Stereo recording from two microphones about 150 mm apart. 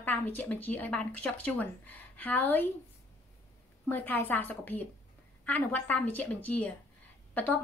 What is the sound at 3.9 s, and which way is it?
A woman's voice, 10° left (ahead or behind).